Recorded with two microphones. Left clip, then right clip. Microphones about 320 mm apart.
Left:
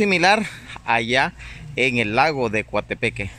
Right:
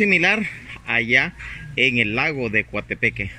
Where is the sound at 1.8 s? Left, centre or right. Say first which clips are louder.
Right 2 dB; left.